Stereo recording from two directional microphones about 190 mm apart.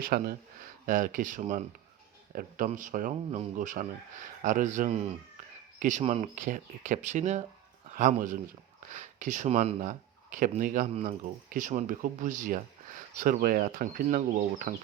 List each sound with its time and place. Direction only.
0.0 s speech: 50° right (ahead or behind)